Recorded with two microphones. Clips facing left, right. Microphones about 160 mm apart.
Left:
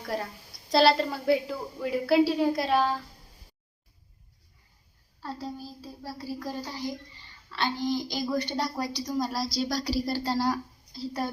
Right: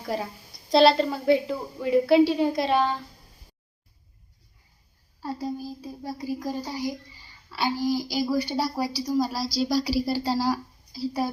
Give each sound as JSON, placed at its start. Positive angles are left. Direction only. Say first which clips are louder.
{"t": 0.0, "sound": "a woman's voice", "louder": "right 3 dB", "side_deg": 0}
{"t": 5.2, "sound": "speech", "louder": "right 5 dB", "side_deg": -10}